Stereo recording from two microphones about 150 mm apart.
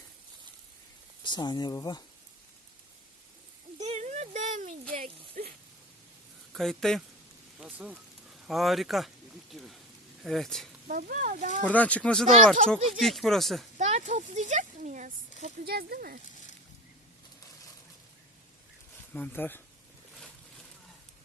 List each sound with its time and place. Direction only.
1.2 s speech: 30° left (ahead or behind)
3.8 s a sound: 50° right (ahead or behind)
6.5 s a man's voice: centre (ahead or behind)
7.6 s speech: 10° right (ahead or behind)
10.8 s speech: 65° right (ahead or behind)
11.6 s speech: 10° left (ahead or behind)
13.7 s speech: 50° right (ahead or behind); by 16.1 s 85° right
19.1 s speech: 10° left (ahead or behind)
20.1 s boat: 5° left (ahead or behind)